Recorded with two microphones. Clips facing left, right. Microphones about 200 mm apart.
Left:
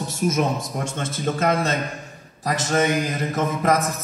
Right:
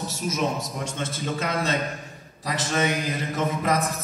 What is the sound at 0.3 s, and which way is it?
A man's voice, 50° left (ahead or behind).